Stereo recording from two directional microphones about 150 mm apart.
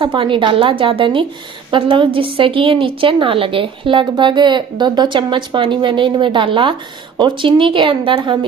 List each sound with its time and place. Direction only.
0.0 s a woman's voice: 35° right (ahead or behind)